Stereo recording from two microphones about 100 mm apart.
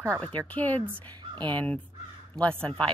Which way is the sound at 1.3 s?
50° right (ahead or behind).